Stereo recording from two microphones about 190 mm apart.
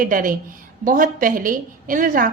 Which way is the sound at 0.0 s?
45° right (ahead or behind).